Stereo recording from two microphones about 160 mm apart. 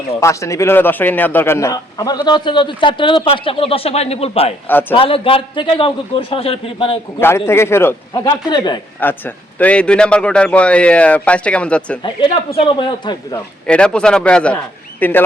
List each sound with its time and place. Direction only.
0.2 s a man's voice: 20° left (ahead or behind); by 4.5 s 40° left (ahead or behind)
4.6 s a man's voice: 10° left (ahead or behind)
4.9 s speech: 35° left (ahead or behind)
7.2 s a man's voice: 15° left (ahead or behind)
9.0 s a man's voice: 10° left (ahead or behind)
13.0 s a man's voice: 30° left (ahead or behind)
13.7 s a man's voice: 5° left (ahead or behind)